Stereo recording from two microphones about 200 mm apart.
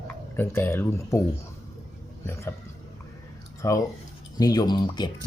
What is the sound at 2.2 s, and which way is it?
Speech, 15° left (ahead or behind).